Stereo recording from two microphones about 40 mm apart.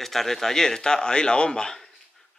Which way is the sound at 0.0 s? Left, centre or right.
Centre.